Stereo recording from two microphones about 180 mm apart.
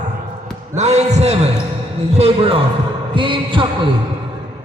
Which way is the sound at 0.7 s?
40° right (ahead or behind).